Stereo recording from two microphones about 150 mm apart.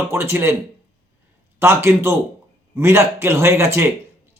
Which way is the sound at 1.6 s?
15° right (ahead or behind).